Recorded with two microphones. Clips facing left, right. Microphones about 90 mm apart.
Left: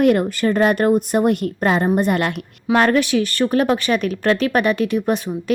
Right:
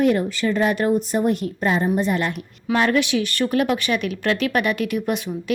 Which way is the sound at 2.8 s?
45° left (ahead or behind).